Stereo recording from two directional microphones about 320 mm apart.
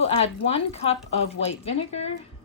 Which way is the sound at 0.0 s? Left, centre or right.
Centre.